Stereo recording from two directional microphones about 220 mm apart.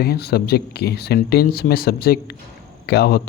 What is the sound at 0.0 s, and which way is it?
A man's voice, 45° left (ahead or behind).